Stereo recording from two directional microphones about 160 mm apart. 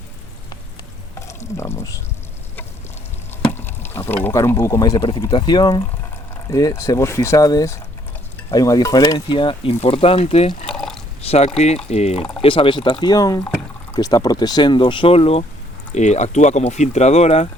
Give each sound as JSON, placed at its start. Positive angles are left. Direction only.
{"t": 1.3, "sound": "speech", "side_deg": 15}
{"t": 3.4, "sound": "speech", "side_deg": 15}
{"t": 10.7, "sound": "pour", "side_deg": 5}
{"t": 11.2, "sound": "speech", "side_deg": 40}